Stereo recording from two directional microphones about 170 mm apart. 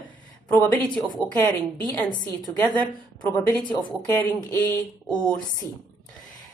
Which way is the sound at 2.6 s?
10° left (ahead or behind).